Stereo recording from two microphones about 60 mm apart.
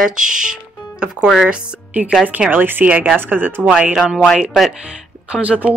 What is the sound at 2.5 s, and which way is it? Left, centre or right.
Speech, right.